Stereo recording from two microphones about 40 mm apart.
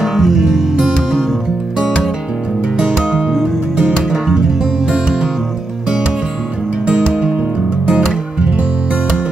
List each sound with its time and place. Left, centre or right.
0.2 s music: centre
4.9 s music: centre